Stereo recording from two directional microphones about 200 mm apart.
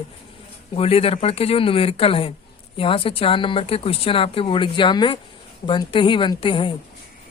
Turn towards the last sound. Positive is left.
turn(degrees=25)  # may be behind; listen again after turning